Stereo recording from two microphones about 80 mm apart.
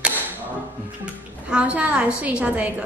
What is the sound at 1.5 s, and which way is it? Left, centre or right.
A woman's voice, centre.